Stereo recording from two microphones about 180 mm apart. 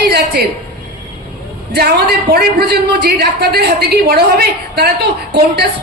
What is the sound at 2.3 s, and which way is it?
A woman's voice, 65° right (ahead or behind).